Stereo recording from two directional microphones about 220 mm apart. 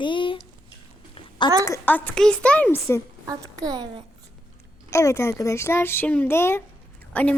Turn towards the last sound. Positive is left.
turn(degrees=5)  # may be behind; listen again after turning